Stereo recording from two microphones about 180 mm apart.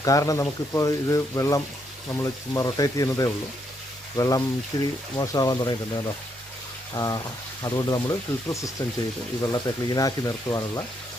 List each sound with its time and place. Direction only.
0.0 s speech: 20° left (ahead or behind)
6.9 s speech: 20° left (ahead or behind)